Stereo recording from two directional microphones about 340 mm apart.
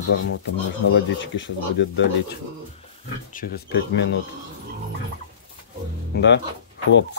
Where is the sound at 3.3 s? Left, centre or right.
Left.